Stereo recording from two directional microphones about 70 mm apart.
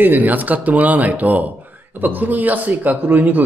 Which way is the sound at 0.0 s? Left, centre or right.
Right.